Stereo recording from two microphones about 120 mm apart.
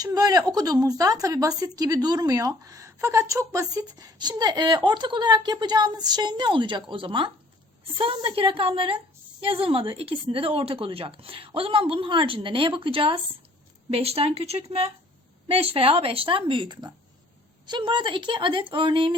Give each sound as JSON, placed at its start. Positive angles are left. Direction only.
{"t": 0.0, "sound": "speech", "side_deg": -30}